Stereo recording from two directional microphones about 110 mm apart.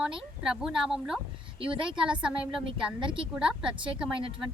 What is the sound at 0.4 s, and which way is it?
Speech, 5° right (ahead or behind).